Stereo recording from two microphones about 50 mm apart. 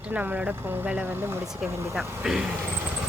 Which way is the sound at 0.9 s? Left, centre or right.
Right.